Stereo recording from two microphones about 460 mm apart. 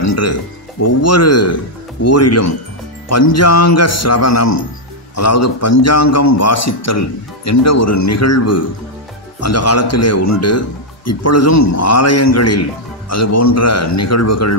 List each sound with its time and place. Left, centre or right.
0.0 s a man's voice: left